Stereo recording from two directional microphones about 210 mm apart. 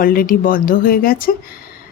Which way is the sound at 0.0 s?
45° left (ahead or behind).